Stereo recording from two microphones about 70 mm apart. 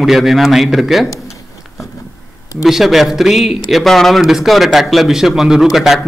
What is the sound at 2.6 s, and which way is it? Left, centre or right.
A man's voice, centre.